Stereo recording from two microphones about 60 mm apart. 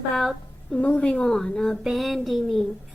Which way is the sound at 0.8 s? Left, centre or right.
Centre.